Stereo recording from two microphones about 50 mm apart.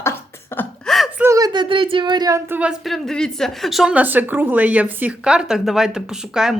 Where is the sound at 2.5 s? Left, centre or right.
Right.